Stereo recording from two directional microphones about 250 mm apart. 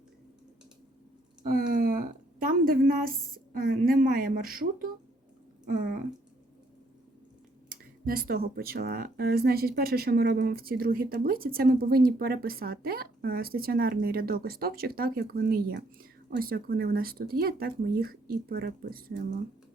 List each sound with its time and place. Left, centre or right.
1.5 s a woman's voice: right
7.7 s speech: right